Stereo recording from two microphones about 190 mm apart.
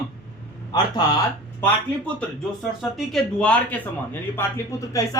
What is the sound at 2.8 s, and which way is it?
Speech, centre (ahead or behind).